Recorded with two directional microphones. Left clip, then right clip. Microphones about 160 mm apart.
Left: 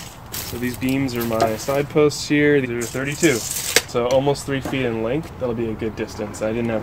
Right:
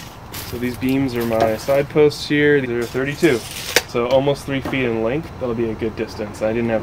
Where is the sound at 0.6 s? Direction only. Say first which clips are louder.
Right 2 dB; 20° left (ahead or behind).